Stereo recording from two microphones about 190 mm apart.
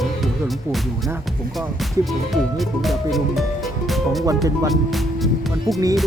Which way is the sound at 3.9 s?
Centre (ahead or behind).